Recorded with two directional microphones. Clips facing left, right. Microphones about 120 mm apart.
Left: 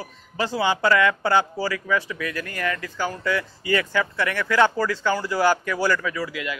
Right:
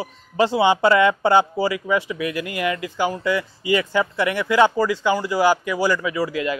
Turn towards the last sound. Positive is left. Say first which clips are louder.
# right 6 dB
turn(degrees=-30)  # may be behind; listen again after turning